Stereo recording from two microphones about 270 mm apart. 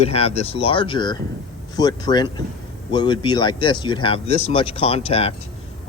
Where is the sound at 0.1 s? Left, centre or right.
Left.